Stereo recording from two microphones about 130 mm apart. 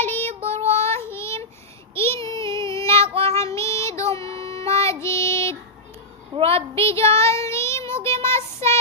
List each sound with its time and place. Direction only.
0.0 s child singing: 15° left (ahead or behind)
3.1 s child singing: 45° right (ahead or behind)
3.3 s child singing: 20° left (ahead or behind)
6.3 s a sound: 45° right (ahead or behind)
6.7 s child singing: 20° left (ahead or behind)